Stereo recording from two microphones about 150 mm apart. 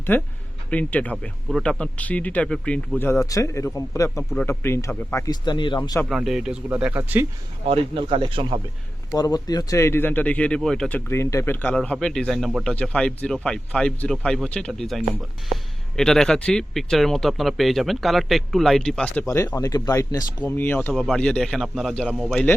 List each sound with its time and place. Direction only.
0.1 s speech: 15° left (ahead or behind)
4.2 s speech: 5° left (ahead or behind)
4.4 s speech: 15° left (ahead or behind)
6.1 s speech: centre (ahead or behind)
7.7 s speech: 40° right (ahead or behind)
9.1 s speech: 25° left (ahead or behind); by 19.2 s 5° left (ahead or behind)
19.3 s speech: 20° left (ahead or behind); by 22.4 s centre (ahead or behind)